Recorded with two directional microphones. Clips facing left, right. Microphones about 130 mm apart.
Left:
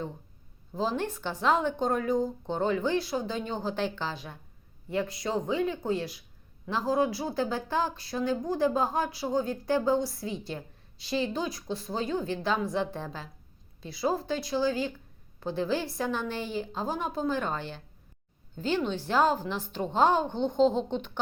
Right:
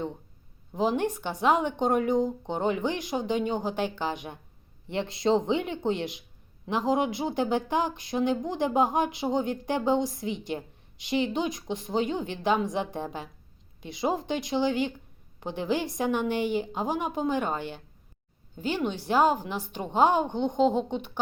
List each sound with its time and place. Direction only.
0.7 s speech: 15° right (ahead or behind)